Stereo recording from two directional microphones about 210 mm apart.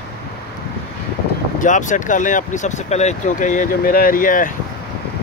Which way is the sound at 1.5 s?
35° left (ahead or behind).